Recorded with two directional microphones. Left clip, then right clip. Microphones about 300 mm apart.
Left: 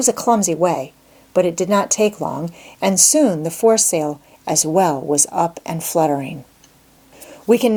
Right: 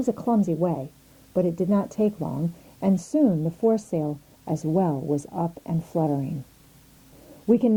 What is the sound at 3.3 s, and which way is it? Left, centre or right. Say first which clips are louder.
A woman's voice: left 8 dB; centre.